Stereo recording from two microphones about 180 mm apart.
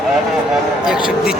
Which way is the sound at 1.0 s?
5° right (ahead or behind).